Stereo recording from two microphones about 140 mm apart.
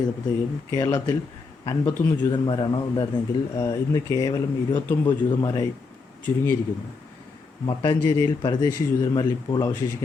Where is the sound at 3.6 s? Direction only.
20° left (ahead or behind).